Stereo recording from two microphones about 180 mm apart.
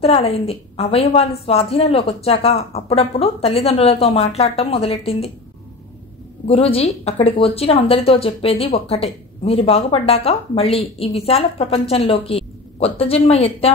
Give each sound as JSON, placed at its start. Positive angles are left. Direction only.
{"t": 0.0, "sound": "a woman's voice", "side_deg": 35}
{"t": 6.4, "sound": "a woman's voice", "side_deg": 30}